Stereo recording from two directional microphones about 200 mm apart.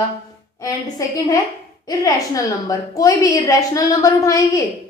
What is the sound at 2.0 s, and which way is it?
A woman's voice, 15° left (ahead or behind).